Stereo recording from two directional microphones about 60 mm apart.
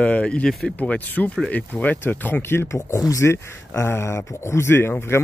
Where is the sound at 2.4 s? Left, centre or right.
Left.